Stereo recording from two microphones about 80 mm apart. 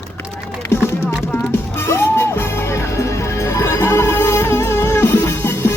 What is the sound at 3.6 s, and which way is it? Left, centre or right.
Music, left.